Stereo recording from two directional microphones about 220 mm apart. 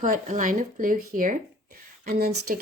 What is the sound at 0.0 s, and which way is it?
Speech, 35° right (ahead or behind).